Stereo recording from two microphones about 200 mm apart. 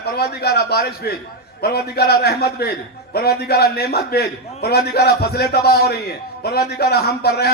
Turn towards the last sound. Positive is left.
turn(degrees=55)  # may be behind; listen again after turning